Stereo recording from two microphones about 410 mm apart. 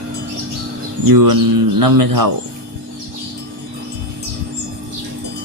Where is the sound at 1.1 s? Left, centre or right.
Right.